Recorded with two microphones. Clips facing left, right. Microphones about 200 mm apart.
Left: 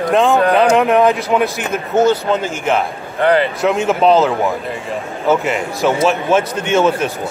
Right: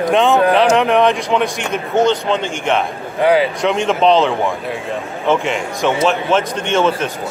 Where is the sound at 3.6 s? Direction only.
5° left (ahead or behind).